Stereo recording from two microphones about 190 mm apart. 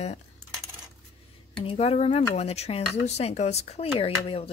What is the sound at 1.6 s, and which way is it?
A woman's voice, 30° left (ahead or behind).